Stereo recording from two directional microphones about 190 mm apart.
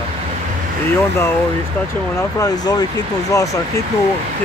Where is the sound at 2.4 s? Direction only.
20° left (ahead or behind).